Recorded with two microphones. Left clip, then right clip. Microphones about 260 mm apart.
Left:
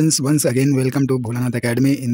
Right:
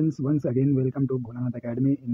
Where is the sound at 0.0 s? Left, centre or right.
Left.